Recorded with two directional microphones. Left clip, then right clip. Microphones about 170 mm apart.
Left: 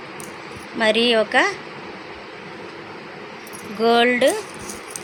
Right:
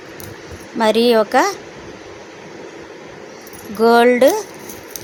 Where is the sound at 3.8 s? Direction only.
45° right (ahead or behind).